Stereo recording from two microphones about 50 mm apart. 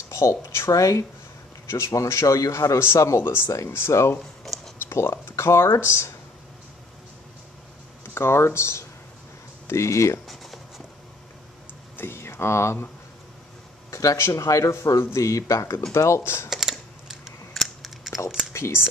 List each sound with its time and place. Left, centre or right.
0.1 s speech: left
1.7 s speech: left
4.5 s a sound: centre
4.9 s speech: left
8.0 s speech: left
9.7 s speech: left
10.2 s a sound: centre
12.0 s a sound: left
13.8 s speech: left
15.9 s speech: left
16.4 s typing: centre
17.6 s scissors: centre
18.1 s computer keyboard: centre
18.5 s speech: left